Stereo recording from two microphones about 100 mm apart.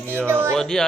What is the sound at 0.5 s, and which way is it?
Speech, 5° left (ahead or behind).